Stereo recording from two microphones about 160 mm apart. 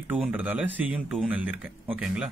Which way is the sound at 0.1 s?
10° right (ahead or behind).